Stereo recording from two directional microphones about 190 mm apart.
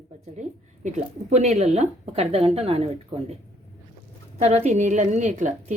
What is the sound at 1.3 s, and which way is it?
A woman's voice, 35° right (ahead or behind).